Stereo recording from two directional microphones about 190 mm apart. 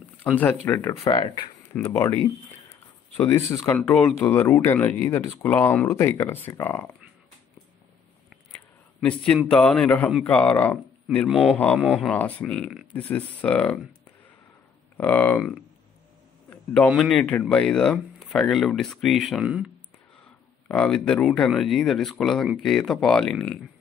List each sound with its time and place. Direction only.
0.2 s speech: 10° left (ahead or behind)
2.7 s a sound: 15° left (ahead or behind)
3.5 s speech: 10° left (ahead or behind)
9.0 s speech: 5° left (ahead or behind)
15.0 s speech: 5° left (ahead or behind)
20.6 s speech: 5° left (ahead or behind)